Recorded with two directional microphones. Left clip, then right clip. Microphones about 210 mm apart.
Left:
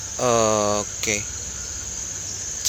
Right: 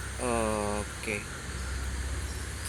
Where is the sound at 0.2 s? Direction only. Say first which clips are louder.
Left 11 dB; 55° left (ahead or behind).